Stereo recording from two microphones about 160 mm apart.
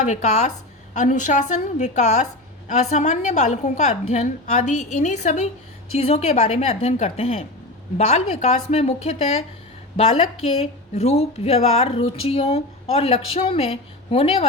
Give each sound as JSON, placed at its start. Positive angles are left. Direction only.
{"t": 0.1, "sound": "a woman's voice", "side_deg": 45}